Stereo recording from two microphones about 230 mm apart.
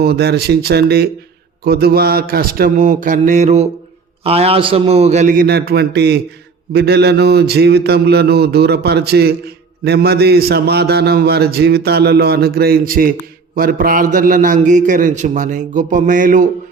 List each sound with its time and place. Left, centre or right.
0.0 s a man's voice: right